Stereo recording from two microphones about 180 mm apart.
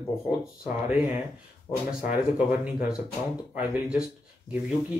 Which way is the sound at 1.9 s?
50° left (ahead or behind).